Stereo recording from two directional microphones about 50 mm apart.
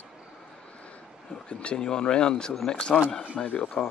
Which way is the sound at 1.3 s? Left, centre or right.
Left.